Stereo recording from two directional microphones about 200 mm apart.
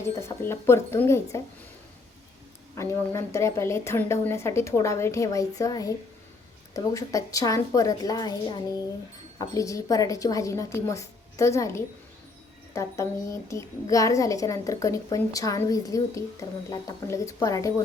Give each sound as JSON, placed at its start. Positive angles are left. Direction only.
{"t": 0.0, "sound": "a woman's voice", "side_deg": 15}
{"t": 2.7, "sound": "a woman's voice", "side_deg": 15}